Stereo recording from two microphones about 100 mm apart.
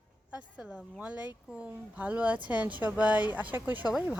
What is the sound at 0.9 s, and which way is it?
A woman's voice, 15° right (ahead or behind).